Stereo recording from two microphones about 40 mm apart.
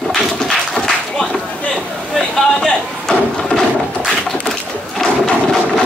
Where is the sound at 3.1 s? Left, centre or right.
Left.